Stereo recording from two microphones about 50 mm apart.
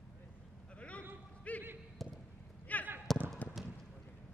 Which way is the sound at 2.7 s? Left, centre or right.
Left.